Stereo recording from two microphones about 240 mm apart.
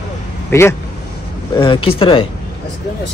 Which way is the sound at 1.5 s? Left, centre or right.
Left.